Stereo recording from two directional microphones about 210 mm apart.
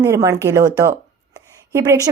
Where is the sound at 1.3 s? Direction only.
15° right (ahead or behind).